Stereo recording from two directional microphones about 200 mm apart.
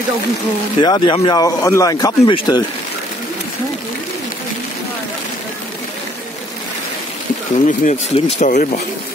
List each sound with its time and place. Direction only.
0.7 s speech: 20° left (ahead or behind)
7.6 s speech: 40° left (ahead or behind)